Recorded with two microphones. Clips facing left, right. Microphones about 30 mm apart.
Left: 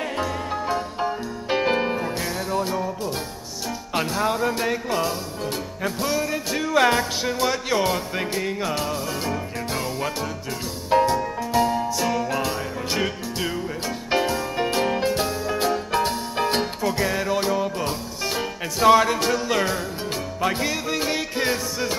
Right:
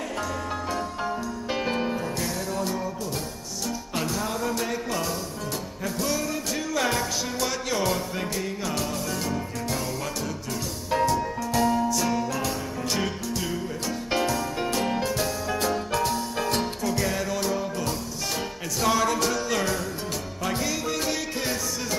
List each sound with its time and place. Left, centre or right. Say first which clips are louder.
0.2 s music: left 3 dB; left
3.9 s speech: left 7 dB; left
5.8 s music: left 4 dB; left
14.1 s music: left 4 dB; left
15.4 s music: left 3 dB; centre
15.9 s music: left 2 dB; left